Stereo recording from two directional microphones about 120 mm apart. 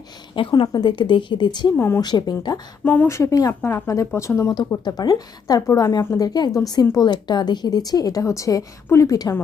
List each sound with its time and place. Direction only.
0.3 s a woman's voice: 45° left (ahead or behind)
1.7 s a woman's voice: 20° left (ahead or behind)
2.0 s a woman's voice: 35° left (ahead or behind)
2.8 s a woman's voice: 15° left (ahead or behind)